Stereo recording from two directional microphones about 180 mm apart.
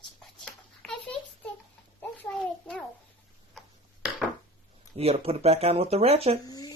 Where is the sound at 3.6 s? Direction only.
Centre (ahead or behind).